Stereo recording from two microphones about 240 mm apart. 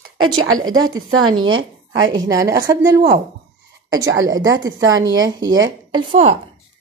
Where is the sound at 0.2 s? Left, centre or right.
Right.